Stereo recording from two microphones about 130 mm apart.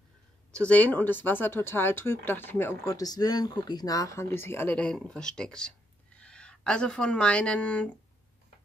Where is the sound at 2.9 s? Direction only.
30° left (ahead or behind).